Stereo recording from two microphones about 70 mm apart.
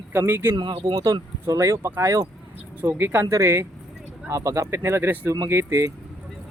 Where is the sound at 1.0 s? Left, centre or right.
Right.